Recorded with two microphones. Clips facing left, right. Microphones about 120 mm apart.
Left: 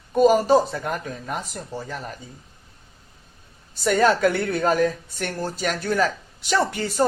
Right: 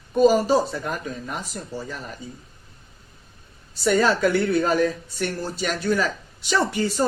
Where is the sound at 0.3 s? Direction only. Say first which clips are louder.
Left 2 dB; 55° left (ahead or behind).